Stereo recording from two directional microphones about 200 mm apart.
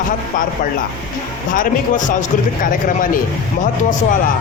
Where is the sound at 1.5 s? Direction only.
40° left (ahead or behind).